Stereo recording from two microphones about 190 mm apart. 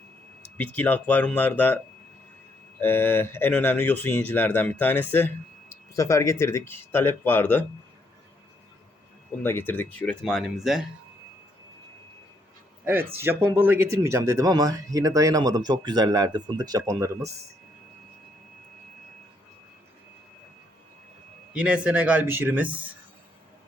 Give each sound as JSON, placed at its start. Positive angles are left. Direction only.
{"t": 0.5, "sound": "speech", "side_deg": 10}
{"t": 2.8, "sound": "speech", "side_deg": 10}
{"t": 9.4, "sound": "speech", "side_deg": 10}
{"t": 12.8, "sound": "speech", "side_deg": -10}
{"t": 21.5, "sound": "speech", "side_deg": -5}